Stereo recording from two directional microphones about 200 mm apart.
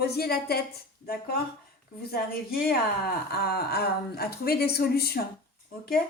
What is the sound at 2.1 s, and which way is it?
A woman's voice, 50° left (ahead or behind).